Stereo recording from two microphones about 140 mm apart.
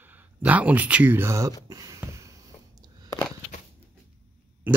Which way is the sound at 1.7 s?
25° right (ahead or behind).